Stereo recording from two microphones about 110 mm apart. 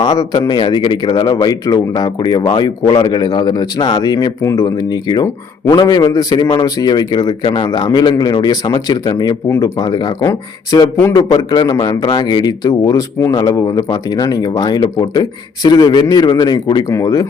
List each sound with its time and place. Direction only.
0.0 s a man's voice: 35° left (ahead or behind)
16.9 s a man's voice: 30° left (ahead or behind)